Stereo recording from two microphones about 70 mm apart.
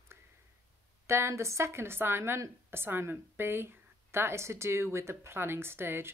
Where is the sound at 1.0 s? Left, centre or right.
Right.